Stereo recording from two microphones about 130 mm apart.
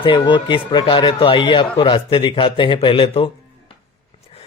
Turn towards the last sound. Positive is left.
turn(degrees=45)  # may be behind; listen again after turning